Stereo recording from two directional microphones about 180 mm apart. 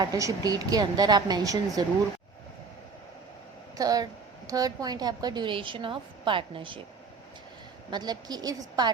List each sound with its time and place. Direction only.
0.0 s a woman's voice: 20° right (ahead or behind)
3.8 s a woman's voice: 20° right (ahead or behind)
7.9 s a woman's voice: 25° right (ahead or behind)